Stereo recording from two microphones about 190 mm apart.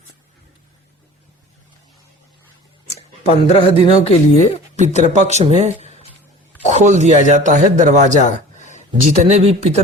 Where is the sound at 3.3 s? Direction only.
35° left (ahead or behind).